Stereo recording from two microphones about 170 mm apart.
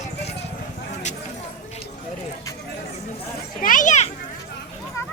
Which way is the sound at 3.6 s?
50° left (ahead or behind).